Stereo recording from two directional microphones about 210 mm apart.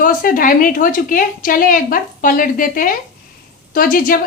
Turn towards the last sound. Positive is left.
turn(degrees=40)  # may be behind; listen again after turning